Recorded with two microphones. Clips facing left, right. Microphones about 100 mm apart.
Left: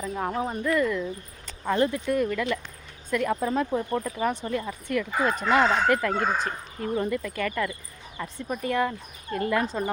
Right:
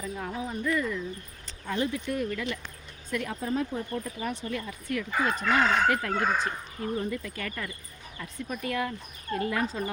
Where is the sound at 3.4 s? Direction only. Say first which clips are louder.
Left 4 dB; 70° left (ahead or behind).